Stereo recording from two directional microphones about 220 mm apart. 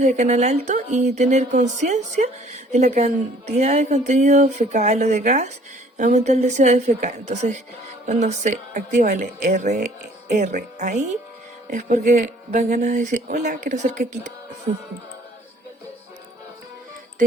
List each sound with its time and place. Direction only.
0.0 s speech: 30° right (ahead or behind)